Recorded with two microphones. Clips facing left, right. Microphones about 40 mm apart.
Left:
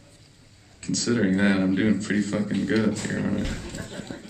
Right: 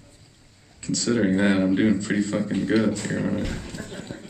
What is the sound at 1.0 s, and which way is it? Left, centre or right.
Speech, centre.